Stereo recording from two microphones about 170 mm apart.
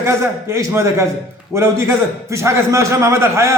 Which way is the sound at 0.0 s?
15° right (ahead or behind).